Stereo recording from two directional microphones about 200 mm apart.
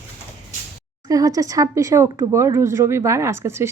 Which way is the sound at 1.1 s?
15° right (ahead or behind).